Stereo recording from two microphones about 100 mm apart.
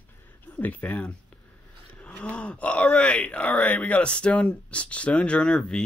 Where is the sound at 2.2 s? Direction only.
10° left (ahead or behind).